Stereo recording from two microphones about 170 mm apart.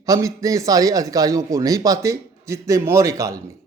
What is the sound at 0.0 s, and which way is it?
A man's voice, 20° right (ahead or behind).